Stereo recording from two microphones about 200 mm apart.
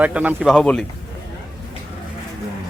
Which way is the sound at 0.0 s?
5° right (ahead or behind).